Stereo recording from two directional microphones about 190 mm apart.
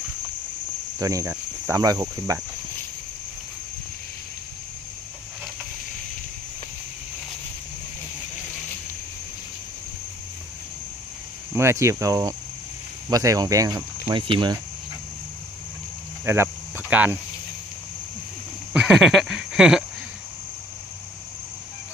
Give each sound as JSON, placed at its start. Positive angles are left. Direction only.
{"t": 0.9, "sound": "speech", "side_deg": -15}
{"t": 11.5, "sound": "speech", "side_deg": -15}
{"t": 16.2, "sound": "cricket", "side_deg": -15}
{"t": 18.7, "sound": "a sound", "side_deg": -5}